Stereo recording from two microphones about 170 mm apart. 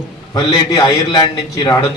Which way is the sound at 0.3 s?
25° left (ahead or behind).